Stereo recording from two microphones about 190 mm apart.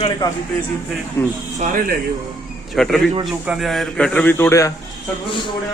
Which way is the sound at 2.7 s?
Centre (ahead or behind).